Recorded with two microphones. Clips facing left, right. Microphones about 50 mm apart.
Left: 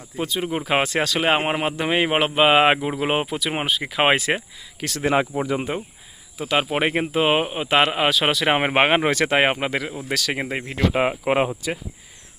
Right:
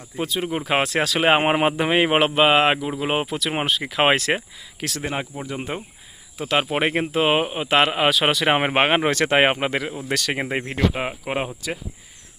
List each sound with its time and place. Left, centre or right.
0.2 s speech: centre
2.8 s speech: centre
5.0 s speech: left
5.7 s speech: centre
9.3 s speech: centre
10.9 s speech: left